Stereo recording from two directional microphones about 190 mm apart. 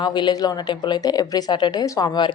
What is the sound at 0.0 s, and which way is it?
A woman's voice, 20° left (ahead or behind).